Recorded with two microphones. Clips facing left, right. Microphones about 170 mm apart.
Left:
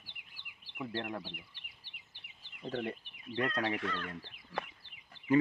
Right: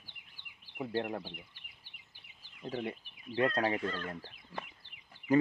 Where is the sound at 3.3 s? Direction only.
30° right (ahead or behind).